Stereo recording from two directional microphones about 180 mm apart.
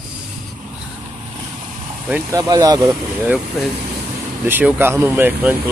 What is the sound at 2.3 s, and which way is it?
Speech, 20° right (ahead or behind).